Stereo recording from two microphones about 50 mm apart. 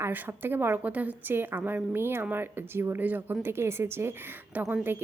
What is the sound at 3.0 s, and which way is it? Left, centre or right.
A woman's voice, right.